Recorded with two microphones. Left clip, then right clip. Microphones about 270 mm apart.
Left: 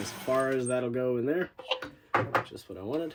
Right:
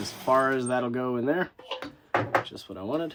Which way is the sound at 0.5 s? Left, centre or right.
Centre.